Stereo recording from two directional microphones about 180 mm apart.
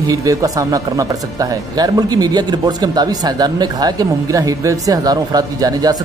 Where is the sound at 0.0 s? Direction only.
20° right (ahead or behind).